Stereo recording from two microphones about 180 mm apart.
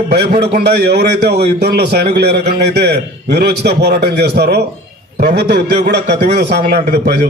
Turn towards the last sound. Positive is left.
turn(degrees=-65)  # may be behind; listen again after turning